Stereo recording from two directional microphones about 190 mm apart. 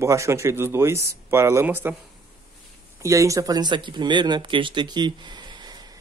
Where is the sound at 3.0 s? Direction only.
15° right (ahead or behind).